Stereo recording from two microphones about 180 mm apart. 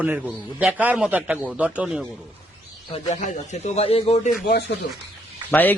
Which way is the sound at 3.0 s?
40° left (ahead or behind).